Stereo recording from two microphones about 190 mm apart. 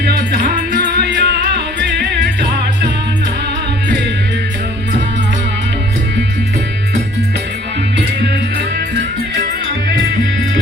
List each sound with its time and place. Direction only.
0.0 s music: 55° right (ahead or behind)